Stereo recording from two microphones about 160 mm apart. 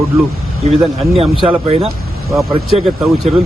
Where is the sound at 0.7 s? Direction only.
40° right (ahead or behind).